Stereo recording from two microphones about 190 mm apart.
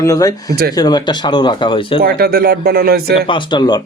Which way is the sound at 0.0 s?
15° left (ahead or behind).